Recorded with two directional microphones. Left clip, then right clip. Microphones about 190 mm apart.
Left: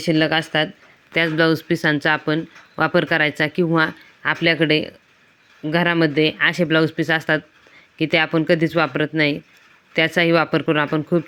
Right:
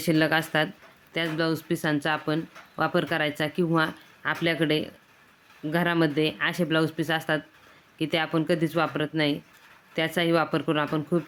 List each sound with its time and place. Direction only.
0.0 s speech: 10° left (ahead or behind)
1.1 s speech: 30° left (ahead or behind)